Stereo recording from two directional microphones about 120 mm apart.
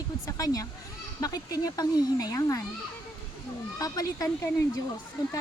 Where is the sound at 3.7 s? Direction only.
30° left (ahead or behind).